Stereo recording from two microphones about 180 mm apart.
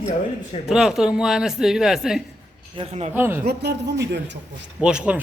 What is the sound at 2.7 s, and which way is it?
Speech, 35° right (ahead or behind).